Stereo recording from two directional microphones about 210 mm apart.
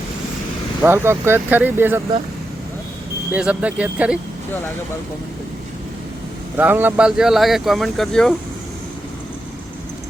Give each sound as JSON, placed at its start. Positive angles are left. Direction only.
{"t": 0.8, "sound": "speech", "side_deg": -10}
{"t": 3.3, "sound": "speech", "side_deg": -5}
{"t": 6.6, "sound": "speech", "side_deg": -10}